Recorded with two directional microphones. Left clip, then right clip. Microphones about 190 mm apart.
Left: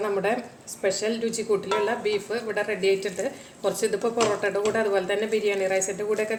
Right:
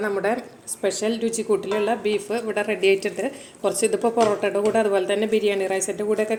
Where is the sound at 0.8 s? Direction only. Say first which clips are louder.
Right 2 dB; 30° right (ahead or behind).